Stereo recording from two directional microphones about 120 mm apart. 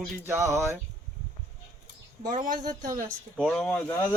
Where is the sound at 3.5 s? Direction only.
10° left (ahead or behind).